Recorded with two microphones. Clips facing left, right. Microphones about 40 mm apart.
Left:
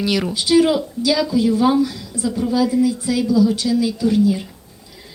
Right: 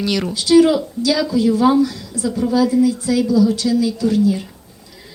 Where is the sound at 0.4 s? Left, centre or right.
Centre.